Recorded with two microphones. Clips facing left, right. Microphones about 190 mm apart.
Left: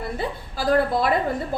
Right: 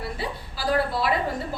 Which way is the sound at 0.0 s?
50° left (ahead or behind).